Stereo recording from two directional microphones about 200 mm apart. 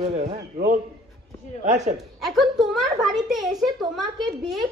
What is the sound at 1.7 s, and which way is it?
Speech, 35° right (ahead or behind).